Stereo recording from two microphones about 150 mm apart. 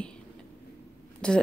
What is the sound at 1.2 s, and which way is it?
Speech, 5° left (ahead or behind).